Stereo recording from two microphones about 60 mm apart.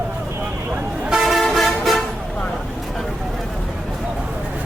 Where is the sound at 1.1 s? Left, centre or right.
Centre.